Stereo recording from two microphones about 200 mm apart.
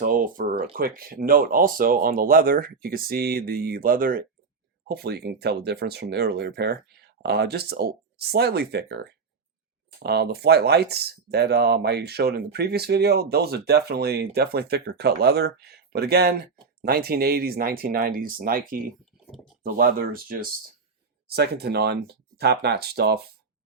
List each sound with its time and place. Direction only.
0.0 s speech: 45° right (ahead or behind)